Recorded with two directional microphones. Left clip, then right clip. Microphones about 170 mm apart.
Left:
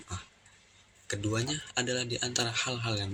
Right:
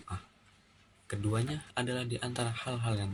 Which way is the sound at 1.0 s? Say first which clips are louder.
Left 3 dB; 15° right (ahead or behind).